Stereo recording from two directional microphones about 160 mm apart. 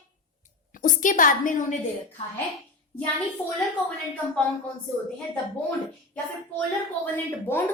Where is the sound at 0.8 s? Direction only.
55° left (ahead or behind).